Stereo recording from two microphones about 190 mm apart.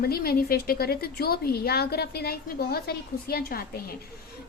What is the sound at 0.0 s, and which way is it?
A woman's voice, 55° left (ahead or behind).